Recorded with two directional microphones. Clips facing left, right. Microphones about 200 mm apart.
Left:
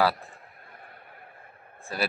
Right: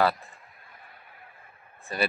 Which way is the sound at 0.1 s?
55° left (ahead or behind).